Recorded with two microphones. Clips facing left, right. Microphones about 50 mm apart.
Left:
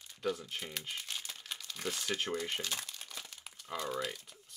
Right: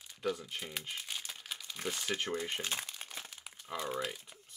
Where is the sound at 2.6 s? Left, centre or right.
Right.